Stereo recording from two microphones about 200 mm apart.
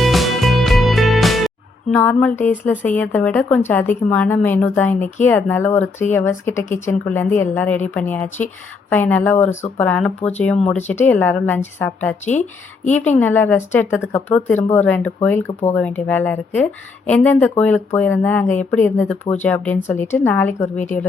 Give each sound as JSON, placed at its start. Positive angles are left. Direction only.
{"t": 0.0, "sound": "music", "side_deg": 0}
{"t": 1.9, "sound": "speech", "side_deg": 10}
{"t": 12.2, "sound": "speech", "side_deg": 35}
{"t": 12.9, "sound": "speech", "side_deg": 10}